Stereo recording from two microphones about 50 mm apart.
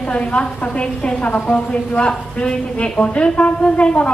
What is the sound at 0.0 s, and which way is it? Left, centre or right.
A woman's voice, left.